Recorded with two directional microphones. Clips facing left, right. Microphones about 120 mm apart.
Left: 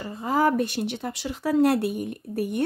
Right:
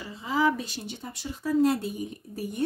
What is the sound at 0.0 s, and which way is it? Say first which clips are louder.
Speech: left 3 dB; 50° left (ahead or behind).